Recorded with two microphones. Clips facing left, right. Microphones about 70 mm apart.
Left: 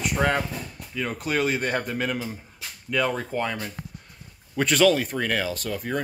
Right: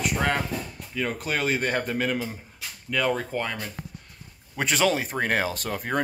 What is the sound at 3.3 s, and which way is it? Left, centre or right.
A man's voice, centre.